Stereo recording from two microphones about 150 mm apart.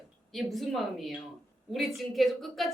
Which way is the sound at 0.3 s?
Centre (ahead or behind).